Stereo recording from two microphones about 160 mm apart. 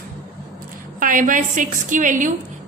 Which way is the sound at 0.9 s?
55° right (ahead or behind).